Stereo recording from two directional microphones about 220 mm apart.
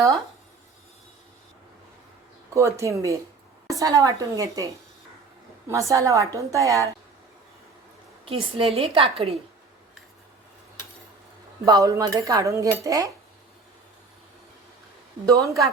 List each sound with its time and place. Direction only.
2.5 s a woman's voice: 15° right (ahead or behind)
8.2 s a woman's voice: 25° right (ahead or behind)
11.6 s a woman's voice: 15° right (ahead or behind)
15.3 s a woman's voice: 15° right (ahead or behind)